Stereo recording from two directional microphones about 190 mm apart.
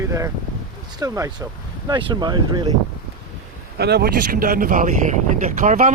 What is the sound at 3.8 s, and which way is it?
Speech, 55° right (ahead or behind).